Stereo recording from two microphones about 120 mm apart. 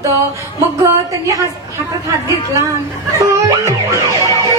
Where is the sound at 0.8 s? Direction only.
25° right (ahead or behind).